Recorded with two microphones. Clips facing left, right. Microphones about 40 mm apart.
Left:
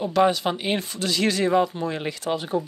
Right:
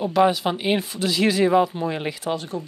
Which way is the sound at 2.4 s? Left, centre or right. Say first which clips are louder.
Left 4 dB; centre.